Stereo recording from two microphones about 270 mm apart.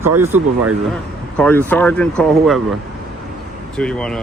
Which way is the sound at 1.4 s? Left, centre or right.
Centre.